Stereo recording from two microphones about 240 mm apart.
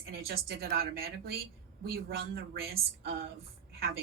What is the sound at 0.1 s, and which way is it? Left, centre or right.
A woman's voice, right.